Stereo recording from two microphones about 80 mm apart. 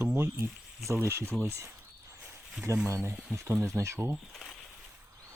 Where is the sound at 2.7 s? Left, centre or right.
Right.